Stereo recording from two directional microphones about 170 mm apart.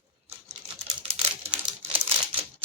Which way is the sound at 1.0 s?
40° right (ahead or behind).